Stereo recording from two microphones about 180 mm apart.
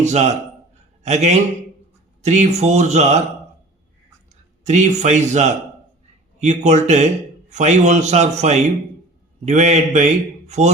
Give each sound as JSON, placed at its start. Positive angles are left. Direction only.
{"t": 0.0, "sound": "a man's voice", "side_deg": -40}
{"t": 4.6, "sound": "a man's voice", "side_deg": -40}